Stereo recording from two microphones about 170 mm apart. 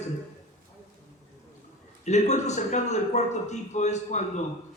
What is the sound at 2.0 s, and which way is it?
A man's voice, 45° left (ahead or behind).